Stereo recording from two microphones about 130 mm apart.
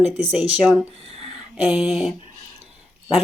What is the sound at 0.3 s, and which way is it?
Speech, 5° right (ahead or behind).